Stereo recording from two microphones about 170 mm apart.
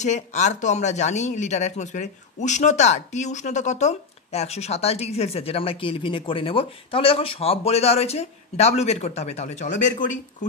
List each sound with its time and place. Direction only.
0.0 s speech: 45° left (ahead or behind)